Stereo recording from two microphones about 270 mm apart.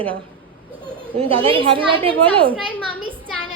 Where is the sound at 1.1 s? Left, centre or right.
Centre.